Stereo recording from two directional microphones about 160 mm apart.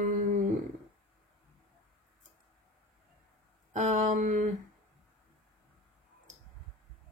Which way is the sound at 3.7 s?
50° right (ahead or behind).